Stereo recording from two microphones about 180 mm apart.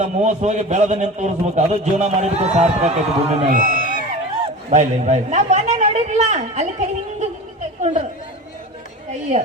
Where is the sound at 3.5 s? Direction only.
50° right (ahead or behind).